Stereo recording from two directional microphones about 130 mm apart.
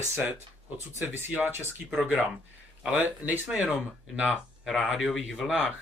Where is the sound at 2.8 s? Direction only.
10° right (ahead or behind).